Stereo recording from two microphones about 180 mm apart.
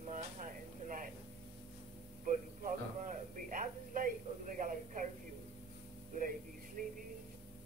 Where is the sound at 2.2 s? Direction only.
45° right (ahead or behind).